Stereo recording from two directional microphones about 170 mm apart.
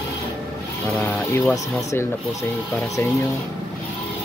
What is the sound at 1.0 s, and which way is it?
Speech, 10° left (ahead or behind).